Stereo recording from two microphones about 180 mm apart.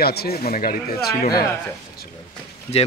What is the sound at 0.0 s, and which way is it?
Speech, 60° left (ahead or behind).